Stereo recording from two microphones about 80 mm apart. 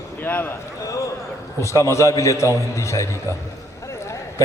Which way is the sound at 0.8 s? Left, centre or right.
Left.